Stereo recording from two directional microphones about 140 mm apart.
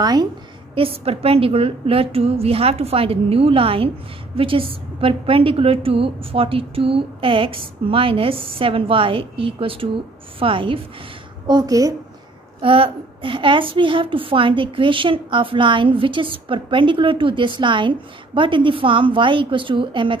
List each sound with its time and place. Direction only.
0.0 s a woman's voice: 30° right (ahead or behind)
0.7 s a woman's voice: 40° right (ahead or behind)
11.4 s a woman's voice: 30° right (ahead or behind)
12.6 s a woman's voice: 40° right (ahead or behind)